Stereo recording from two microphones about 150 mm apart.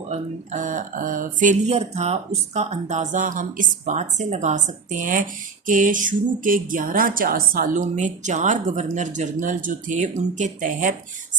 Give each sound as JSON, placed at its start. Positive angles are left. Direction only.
{"t": 0.1, "sound": "music", "side_deg": -55}